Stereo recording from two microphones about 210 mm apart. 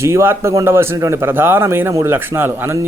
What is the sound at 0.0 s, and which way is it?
Speech, 10° right (ahead or behind).